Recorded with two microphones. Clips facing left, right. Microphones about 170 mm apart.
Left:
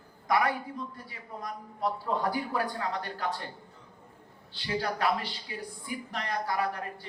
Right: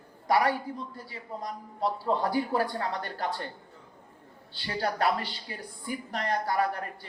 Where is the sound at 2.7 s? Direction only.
45° right (ahead or behind).